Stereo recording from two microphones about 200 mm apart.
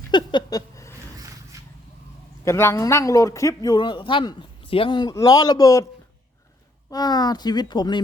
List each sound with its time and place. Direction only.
0.1 s a sound: 20° left (ahead or behind)
2.4 s a man's voice: 15° left (ahead or behind)
6.9 s speech: 20° left (ahead or behind)